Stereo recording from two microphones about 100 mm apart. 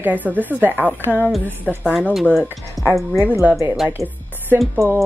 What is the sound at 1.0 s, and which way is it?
Speech, 20° left (ahead or behind).